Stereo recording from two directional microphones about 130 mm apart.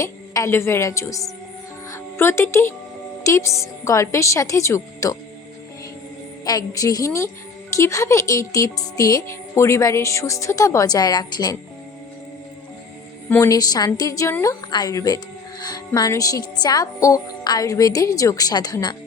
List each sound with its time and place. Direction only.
0.0 s speech: 25° left (ahead or behind)
6.4 s speech: 30° left (ahead or behind)
13.4 s speech: 30° left (ahead or behind)